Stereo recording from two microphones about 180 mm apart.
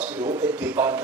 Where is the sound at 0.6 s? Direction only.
10° right (ahead or behind).